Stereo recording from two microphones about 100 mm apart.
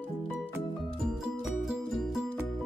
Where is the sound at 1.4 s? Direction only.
5° right (ahead or behind).